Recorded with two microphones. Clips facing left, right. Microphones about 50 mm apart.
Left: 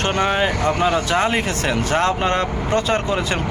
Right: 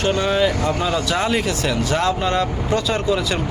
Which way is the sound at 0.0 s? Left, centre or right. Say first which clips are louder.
Right 1 dB; left.